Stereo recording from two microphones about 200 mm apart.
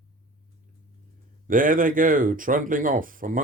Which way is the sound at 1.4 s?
45° right (ahead or behind).